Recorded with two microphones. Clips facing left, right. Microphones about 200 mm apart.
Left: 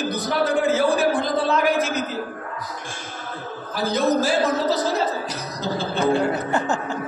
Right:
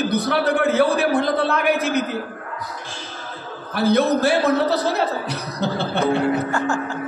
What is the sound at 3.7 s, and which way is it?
Speech, 60° right (ahead or behind).